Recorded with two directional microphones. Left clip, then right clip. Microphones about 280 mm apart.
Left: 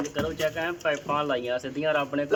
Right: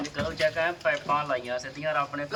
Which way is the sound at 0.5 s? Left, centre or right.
Centre.